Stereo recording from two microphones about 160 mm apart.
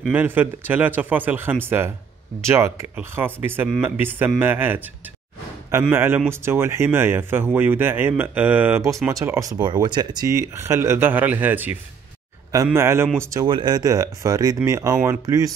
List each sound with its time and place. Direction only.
0.1 s speech: 10° right (ahead or behind)